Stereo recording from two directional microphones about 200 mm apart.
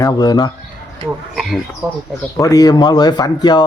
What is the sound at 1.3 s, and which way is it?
Speech, centre (ahead or behind).